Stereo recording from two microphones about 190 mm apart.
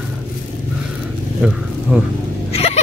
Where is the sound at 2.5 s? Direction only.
35° left (ahead or behind).